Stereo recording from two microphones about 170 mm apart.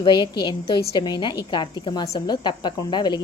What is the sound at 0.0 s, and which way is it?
A woman's voice, 25° left (ahead or behind).